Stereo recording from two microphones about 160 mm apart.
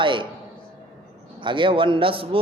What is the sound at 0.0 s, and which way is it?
Speech, 30° right (ahead or behind).